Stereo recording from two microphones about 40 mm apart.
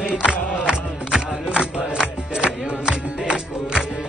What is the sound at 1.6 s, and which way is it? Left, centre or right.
Music, right.